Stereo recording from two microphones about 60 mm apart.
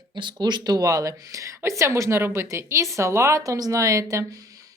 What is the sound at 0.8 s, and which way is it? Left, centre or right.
Speech, right.